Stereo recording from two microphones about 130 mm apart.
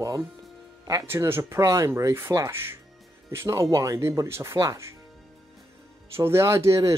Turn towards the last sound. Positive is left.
turn(degrees=-25)  # may be behind; listen again after turning